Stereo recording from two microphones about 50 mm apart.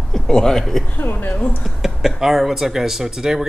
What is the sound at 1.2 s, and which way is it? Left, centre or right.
Speech, left.